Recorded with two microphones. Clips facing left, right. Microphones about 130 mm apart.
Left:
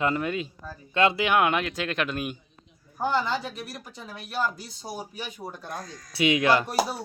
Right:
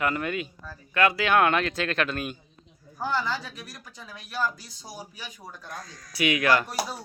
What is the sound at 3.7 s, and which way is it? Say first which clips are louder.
Speech: left 4 dB; 25° left (ahead or behind).